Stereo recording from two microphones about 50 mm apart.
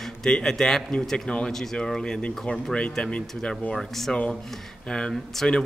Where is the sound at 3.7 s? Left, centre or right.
Centre.